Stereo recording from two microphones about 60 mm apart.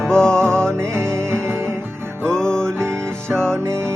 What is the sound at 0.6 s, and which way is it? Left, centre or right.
Music, right.